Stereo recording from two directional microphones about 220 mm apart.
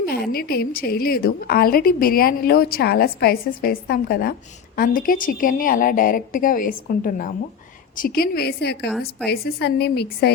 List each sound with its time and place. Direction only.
0.0 s a woman's voice: 45° left (ahead or behind)